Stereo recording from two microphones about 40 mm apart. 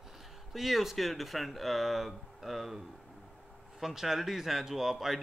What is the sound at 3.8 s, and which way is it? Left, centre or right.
Speech, centre.